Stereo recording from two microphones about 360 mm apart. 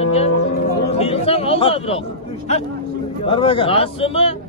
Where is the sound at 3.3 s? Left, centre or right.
Centre.